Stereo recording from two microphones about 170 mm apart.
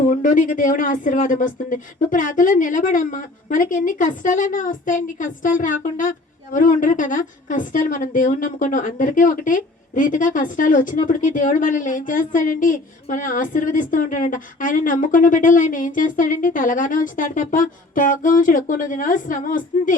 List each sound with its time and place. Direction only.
0.1 s a woman's voice: 50° left (ahead or behind)